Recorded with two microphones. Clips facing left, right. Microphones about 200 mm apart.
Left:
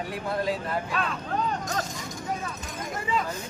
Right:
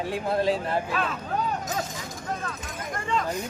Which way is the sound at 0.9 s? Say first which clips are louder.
Right 1 dB; centre (ahead or behind).